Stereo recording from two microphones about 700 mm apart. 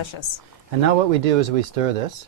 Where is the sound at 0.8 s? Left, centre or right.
Right.